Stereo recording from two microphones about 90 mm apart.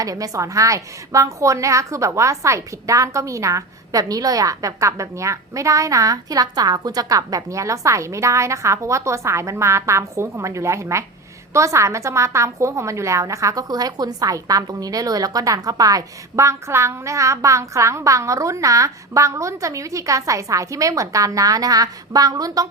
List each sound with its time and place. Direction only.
0.0 s a woman's voice: 40° right (ahead or behind)